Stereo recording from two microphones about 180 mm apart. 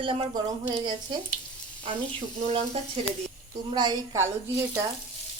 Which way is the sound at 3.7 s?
25° right (ahead or behind).